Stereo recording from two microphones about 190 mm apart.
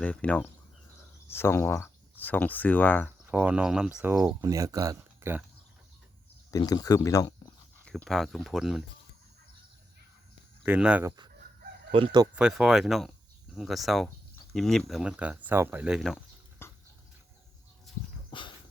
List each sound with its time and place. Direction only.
0.0 s speech: 5° left (ahead or behind)
3.2 s speech: 10° right (ahead or behind)
6.5 s speech: 20° left (ahead or behind)
7.9 s speech: 5° left (ahead or behind)
10.6 s speech: 5° right (ahead or behind)
11.9 s speech: 25° right (ahead or behind)
12.4 s speech: 5° right (ahead or behind)
16.6 s a sound: 10° left (ahead or behind)
17.9 s dog: centre (ahead or behind)
18.3 s dog: 25° left (ahead or behind)